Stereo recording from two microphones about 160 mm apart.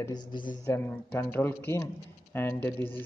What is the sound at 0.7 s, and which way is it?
Speech, 10° left (ahead or behind).